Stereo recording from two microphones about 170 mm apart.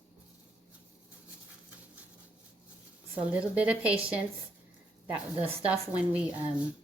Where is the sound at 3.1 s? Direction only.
10° right (ahead or behind).